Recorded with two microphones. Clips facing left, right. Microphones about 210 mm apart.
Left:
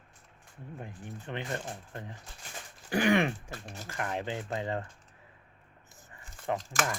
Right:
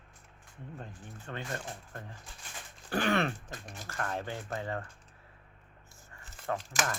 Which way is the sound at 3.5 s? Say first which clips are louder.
Left 2 dB; 15° right (ahead or behind).